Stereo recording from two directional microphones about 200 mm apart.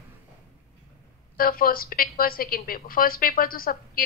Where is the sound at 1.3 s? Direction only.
45° left (ahead or behind).